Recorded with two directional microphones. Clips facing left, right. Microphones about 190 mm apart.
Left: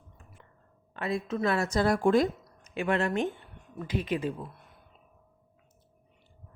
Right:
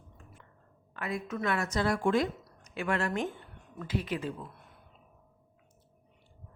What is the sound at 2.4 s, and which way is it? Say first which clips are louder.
Speech: left 4 dB; 20° left (ahead or behind).